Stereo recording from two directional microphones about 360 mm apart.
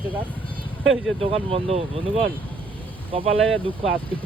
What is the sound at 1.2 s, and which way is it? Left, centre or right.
Speech, centre.